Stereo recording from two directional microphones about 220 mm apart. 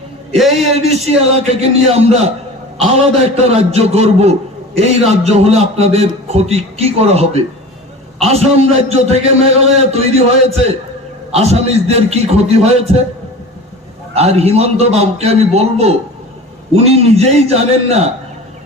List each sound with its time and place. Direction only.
0.5 s a man's voice: 30° right (ahead or behind)
11.3 s a man's voice: 30° right (ahead or behind)
14.1 s a man's voice: 30° right (ahead or behind)